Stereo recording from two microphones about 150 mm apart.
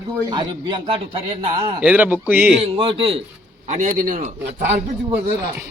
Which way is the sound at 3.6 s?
55° right (ahead or behind).